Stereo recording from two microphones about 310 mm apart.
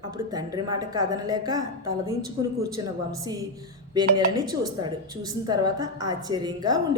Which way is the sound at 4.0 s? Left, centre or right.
Centre.